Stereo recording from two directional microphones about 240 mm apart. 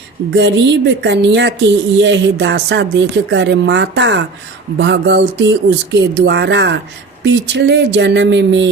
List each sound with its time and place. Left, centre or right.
0.3 s a woman's voice: right